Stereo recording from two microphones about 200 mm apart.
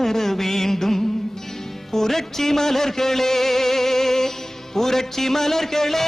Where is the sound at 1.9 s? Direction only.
Centre (ahead or behind).